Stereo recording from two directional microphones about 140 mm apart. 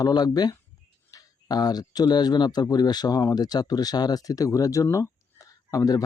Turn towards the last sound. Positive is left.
turn(degrees=25)  # may be behind; listen again after turning